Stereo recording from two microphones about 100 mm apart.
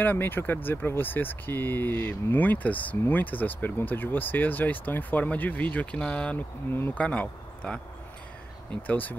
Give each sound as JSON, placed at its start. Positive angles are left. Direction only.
{"t": 0.0, "sound": "speech", "side_deg": 20}
{"t": 6.3, "sound": "speech", "side_deg": 20}
{"t": 7.1, "sound": "speech", "side_deg": 10}
{"t": 8.8, "sound": "speech", "side_deg": 15}